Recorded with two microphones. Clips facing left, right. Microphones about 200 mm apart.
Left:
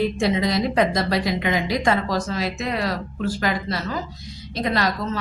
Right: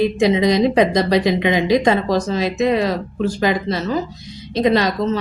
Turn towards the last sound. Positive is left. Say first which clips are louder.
# right 7 dB
turn(degrees=-20)  # may be behind; listen again after turning